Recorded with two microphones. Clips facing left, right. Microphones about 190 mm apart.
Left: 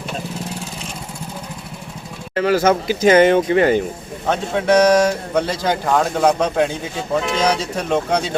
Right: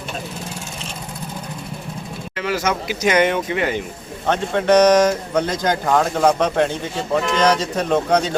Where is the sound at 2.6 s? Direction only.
30° left (ahead or behind).